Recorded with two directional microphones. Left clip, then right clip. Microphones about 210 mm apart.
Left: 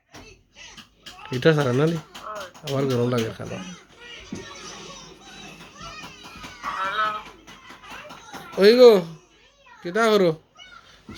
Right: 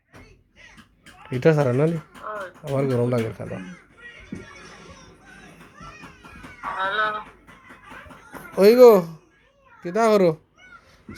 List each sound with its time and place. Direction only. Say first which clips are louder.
1.3 s speech: right 1 dB; 5° left (ahead or behind)
2.2 s a sound: right 4 dB; 40° right (ahead or behind)
2.6 s speech: right 1 dB; 10° left (ahead or behind)
6.6 s a sound: right 1 dB; 40° right (ahead or behind)
8.5 s speech: right 1 dB; 15° left (ahead or behind)
9.8 s speech: right 1 dB; centre (ahead or behind)